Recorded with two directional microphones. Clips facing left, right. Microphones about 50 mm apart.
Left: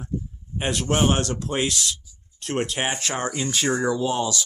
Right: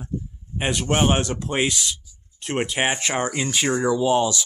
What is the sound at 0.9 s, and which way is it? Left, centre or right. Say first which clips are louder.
Speech: right 1 dB; centre.